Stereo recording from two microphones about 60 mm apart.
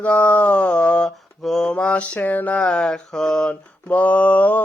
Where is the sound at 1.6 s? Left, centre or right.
Centre.